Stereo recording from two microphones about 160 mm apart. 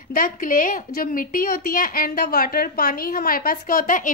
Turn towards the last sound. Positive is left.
turn(degrees=55)  # may be behind; listen again after turning